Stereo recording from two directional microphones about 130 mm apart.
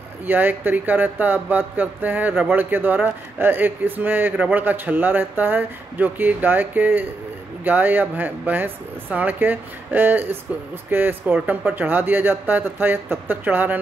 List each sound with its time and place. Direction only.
0.3 s speech: 15° right (ahead or behind)